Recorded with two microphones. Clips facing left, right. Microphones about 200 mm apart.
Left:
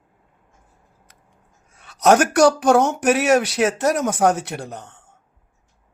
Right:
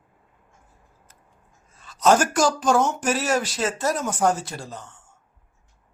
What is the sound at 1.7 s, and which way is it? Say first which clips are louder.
Speech: left 3 dB; 70° left (ahead or behind).